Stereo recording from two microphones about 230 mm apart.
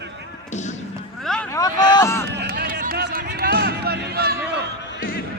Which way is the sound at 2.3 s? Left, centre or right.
Right.